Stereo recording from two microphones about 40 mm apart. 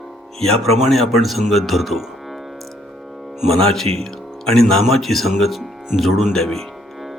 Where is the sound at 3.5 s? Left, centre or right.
Centre.